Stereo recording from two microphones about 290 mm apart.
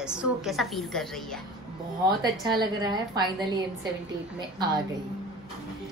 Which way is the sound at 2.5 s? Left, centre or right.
Centre.